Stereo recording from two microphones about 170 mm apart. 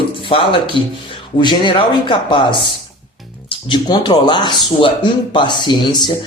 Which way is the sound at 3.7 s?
25° left (ahead or behind).